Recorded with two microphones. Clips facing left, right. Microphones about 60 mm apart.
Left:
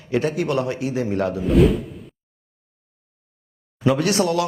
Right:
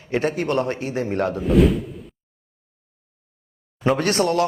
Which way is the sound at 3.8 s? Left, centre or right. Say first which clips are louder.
Even; right.